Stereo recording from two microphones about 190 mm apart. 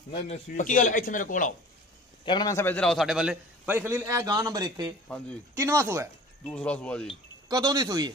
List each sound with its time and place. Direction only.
0.1 s a man's voice: 35° left (ahead or behind)
2.2 s a man's voice: 20° left (ahead or behind); by 6.0 s 15° right (ahead or behind)
6.4 s speech: 5° left (ahead or behind)
7.4 s speech: 20° right (ahead or behind)